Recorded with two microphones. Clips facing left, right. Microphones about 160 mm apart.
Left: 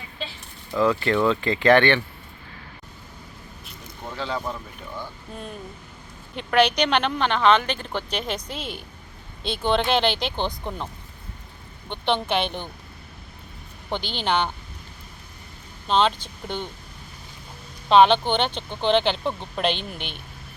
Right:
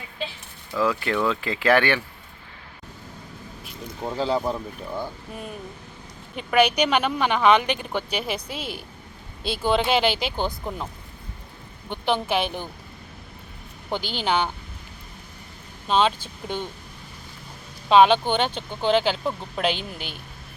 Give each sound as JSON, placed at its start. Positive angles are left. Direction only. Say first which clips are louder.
{"t": 0.8, "sound": "speech", "louder": "left 3 dB", "side_deg": -5}
{"t": 4.0, "sound": "speech", "louder": "right 5 dB", "side_deg": -30}
{"t": 4.9, "sound": "speech", "louder": "right 2 dB", "side_deg": -10}
{"t": 11.9, "sound": "speech", "louder": "even", "side_deg": -5}
{"t": 13.9, "sound": "speech", "louder": "even", "side_deg": -10}
{"t": 15.9, "sound": "speech", "louder": "even", "side_deg": -10}
{"t": 17.8, "sound": "speech", "louder": "even", "side_deg": -10}